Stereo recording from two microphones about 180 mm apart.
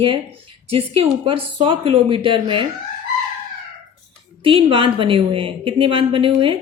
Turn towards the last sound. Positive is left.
turn(degrees=-30)  # may be behind; listen again after turning